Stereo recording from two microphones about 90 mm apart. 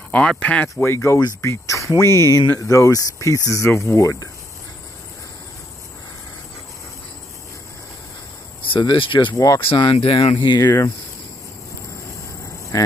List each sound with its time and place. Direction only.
0.1 s speech: 15° left (ahead or behind)
0.7 s speech: 30° left (ahead or behind)
8.6 s speech: 70° left (ahead or behind)
12.7 s speech: 40° left (ahead or behind)